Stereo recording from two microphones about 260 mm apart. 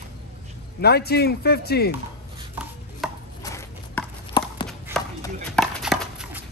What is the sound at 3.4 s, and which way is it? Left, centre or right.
Horse, centre.